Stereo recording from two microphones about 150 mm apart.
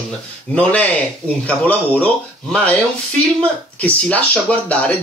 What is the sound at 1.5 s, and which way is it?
Speech, 10° left (ahead or behind).